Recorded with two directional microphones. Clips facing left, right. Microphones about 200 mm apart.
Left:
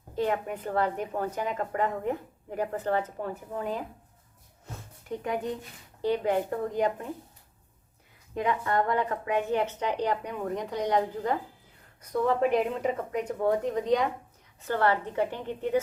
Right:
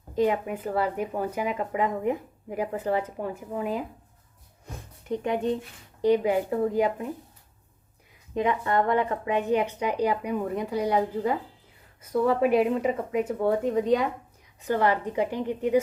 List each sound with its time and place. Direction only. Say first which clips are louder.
0.2 s a woman's voice: right 4 dB; 10° right (ahead or behind)
4.6 s a sound: right 2 dB; 20° right (ahead or behind)
6.0 s a woman's voice: right 4 dB; 10° right (ahead or behind)
8.4 s a woman's voice: right 3 dB; 25° right (ahead or behind); by 14.1 s centre (ahead or behind)
14.6 s a woman's voice: right 2 dB; 15° right (ahead or behind)